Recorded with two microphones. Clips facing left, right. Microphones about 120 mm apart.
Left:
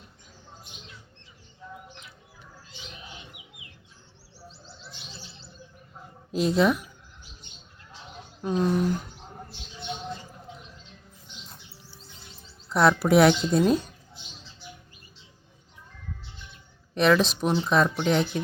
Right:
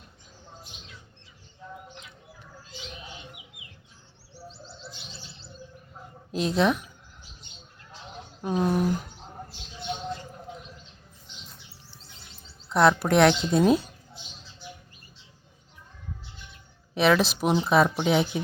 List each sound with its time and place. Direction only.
6.3 s speech: centre (ahead or behind)
8.4 s a sound: 5° right (ahead or behind)
12.6 s speech: centre (ahead or behind)
16.9 s speech: centre (ahead or behind)